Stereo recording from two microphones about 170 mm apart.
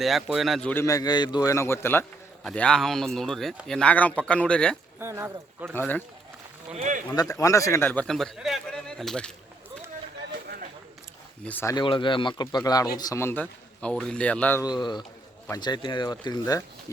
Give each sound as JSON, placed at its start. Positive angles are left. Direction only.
{"t": 0.0, "sound": "speech", "side_deg": 0}
{"t": 0.7, "sound": "a man's voice", "side_deg": 15}
{"t": 2.4, "sound": "speech", "side_deg": 5}
{"t": 4.9, "sound": "speech", "side_deg": -15}
{"t": 5.7, "sound": "a man's voice", "side_deg": 10}
{"t": 6.7, "sound": "a sound", "side_deg": -45}
{"t": 7.2, "sound": "speech", "side_deg": 20}
{"t": 7.9, "sound": "speech", "side_deg": 5}
{"t": 10.4, "sound": "a sound", "side_deg": -65}
{"t": 11.4, "sound": "a man's voice", "side_deg": 15}
{"t": 14.6, "sound": "speech", "side_deg": 25}